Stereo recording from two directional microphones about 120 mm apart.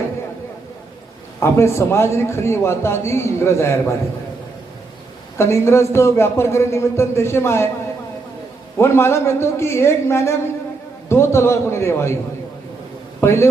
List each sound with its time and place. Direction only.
1.4 s a man's voice: 20° left (ahead or behind)
5.4 s a man's voice: 25° left (ahead or behind)
8.8 s a man's voice: 20° left (ahead or behind)
13.2 s a man's voice: 20° left (ahead or behind)